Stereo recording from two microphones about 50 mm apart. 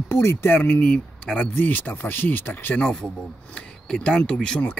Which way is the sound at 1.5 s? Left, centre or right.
Left.